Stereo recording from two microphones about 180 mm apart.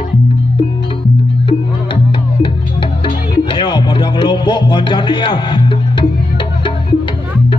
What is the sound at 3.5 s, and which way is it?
Music, 25° left (ahead or behind).